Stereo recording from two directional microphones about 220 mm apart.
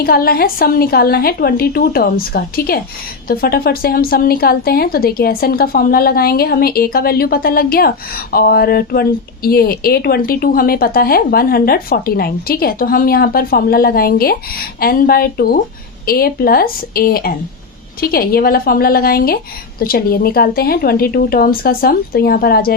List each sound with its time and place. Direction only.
0.0 s a woman's voice: 45° left (ahead or behind)